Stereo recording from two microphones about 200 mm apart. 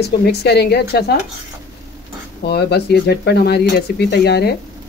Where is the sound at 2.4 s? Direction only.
55° left (ahead or behind).